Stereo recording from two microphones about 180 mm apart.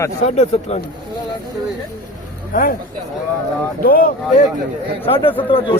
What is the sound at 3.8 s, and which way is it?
Speech, 55° left (ahead or behind).